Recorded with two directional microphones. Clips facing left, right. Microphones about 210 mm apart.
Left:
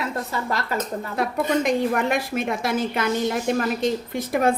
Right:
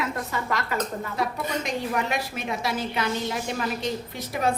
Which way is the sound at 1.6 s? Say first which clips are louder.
Left 6 dB; 55° left (ahead or behind).